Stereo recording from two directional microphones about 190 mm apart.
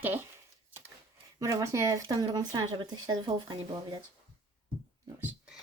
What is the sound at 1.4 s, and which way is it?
Speech, 15° right (ahead or behind).